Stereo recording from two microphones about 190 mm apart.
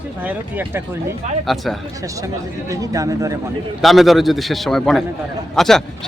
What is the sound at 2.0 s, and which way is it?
Speech, 15° right (ahead or behind).